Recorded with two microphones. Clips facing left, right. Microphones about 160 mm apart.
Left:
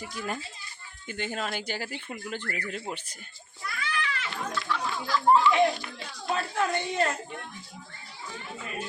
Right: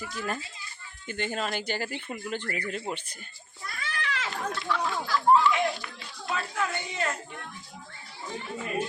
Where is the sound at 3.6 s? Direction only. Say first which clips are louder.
Left 3 dB; 40° right (ahead or behind).